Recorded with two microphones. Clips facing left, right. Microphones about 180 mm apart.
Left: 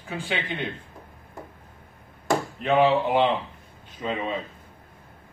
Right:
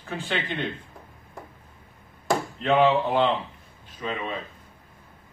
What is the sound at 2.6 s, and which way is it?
Speech, 15° left (ahead or behind).